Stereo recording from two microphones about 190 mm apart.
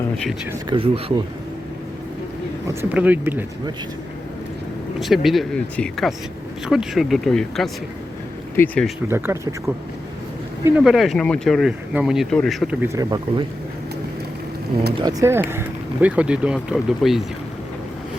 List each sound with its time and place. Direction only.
0.7 s speech: 30° right (ahead or behind)
2.6 s speech: 10° right (ahead or behind)
4.9 s speech: centre (ahead or behind)
9.0 s speech: 10° right (ahead or behind)
10.8 s speech: centre (ahead or behind)
12.8 s speech: 15° right (ahead or behind)
14.9 s speech: 20° right (ahead or behind); by 17.2 s centre (ahead or behind)